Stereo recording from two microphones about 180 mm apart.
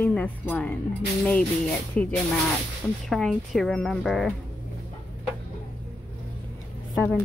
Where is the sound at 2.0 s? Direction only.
5° left (ahead or behind).